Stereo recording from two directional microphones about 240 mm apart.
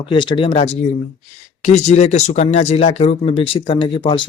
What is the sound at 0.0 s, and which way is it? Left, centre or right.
Speech, left.